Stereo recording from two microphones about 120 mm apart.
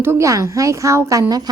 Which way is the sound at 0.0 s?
20° right (ahead or behind).